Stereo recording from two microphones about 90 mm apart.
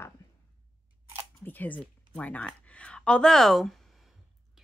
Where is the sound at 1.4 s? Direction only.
20° left (ahead or behind); by 3.8 s 5° left (ahead or behind).